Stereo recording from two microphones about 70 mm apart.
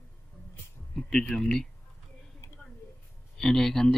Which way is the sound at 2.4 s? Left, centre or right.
Left.